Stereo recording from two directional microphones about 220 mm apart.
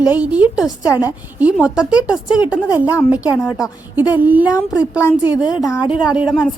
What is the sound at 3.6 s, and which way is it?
A woman's voice, 5° right (ahead or behind).